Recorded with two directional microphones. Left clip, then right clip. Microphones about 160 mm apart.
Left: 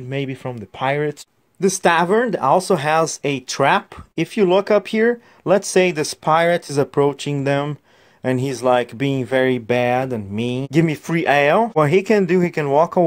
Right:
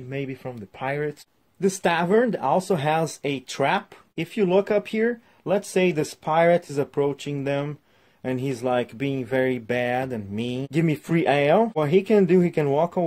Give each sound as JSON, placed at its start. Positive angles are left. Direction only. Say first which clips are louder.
{"t": 0.1, "sound": "speech", "louder": "left 6 dB", "side_deg": 35}
{"t": 1.6, "sound": "speech", "louder": "left 7 dB", "side_deg": 30}